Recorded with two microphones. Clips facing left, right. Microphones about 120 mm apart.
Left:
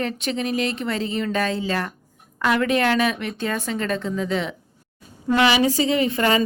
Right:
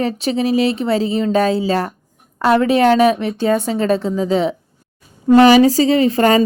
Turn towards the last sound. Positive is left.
turn(degrees=-35)  # may be behind; listen again after turning